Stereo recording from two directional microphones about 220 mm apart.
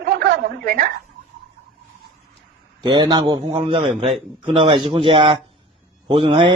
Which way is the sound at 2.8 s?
20° right (ahead or behind).